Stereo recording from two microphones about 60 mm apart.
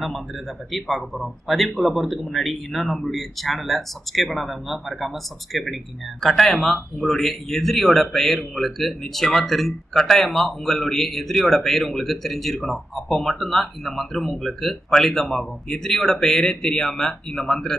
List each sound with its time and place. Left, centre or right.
0.7 s speech: centre